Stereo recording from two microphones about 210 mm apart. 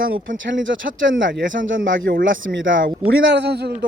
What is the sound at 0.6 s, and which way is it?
A man's voice, 65° right (ahead or behind).